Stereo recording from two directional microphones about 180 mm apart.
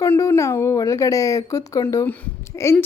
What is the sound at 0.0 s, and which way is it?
A woman's voice, 15° left (ahead or behind).